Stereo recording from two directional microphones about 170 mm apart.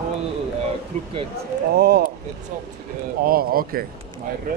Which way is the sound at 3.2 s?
60° right (ahead or behind).